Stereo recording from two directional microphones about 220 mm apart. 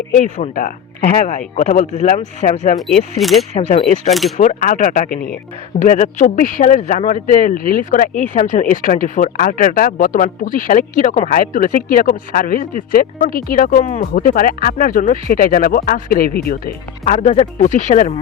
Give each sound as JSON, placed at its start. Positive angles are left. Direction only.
{"t": 0.1, "sound": "speech", "side_deg": 35}
{"t": 3.2, "sound": "speech", "side_deg": 0}
{"t": 3.5, "sound": "speech", "side_deg": 30}
{"t": 17.1, "sound": "speech", "side_deg": 30}